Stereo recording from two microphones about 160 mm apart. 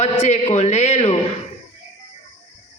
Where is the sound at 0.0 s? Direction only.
45° left (ahead or behind).